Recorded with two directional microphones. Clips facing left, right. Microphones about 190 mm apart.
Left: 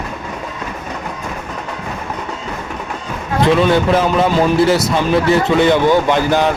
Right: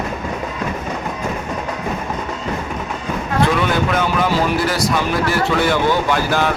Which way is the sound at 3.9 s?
25° left (ahead or behind).